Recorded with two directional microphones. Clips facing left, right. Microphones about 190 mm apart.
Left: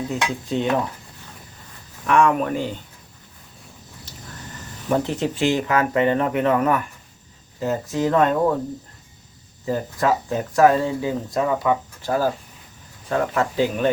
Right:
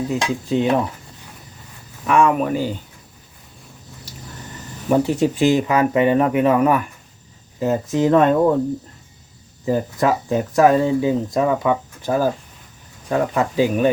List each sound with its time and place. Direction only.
0.1 s speech: centre (ahead or behind)
2.0 s speech: 5° right (ahead or behind)
4.9 s speech: 10° right (ahead or behind)
9.6 s speech: 20° right (ahead or behind)